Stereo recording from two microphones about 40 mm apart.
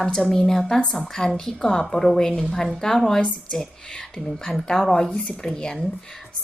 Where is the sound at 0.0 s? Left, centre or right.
Centre.